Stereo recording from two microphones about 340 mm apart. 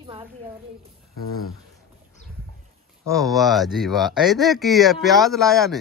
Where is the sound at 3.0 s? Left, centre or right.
Centre.